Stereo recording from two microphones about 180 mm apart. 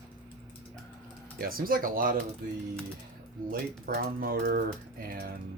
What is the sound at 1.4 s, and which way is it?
Speech, 55° right (ahead or behind).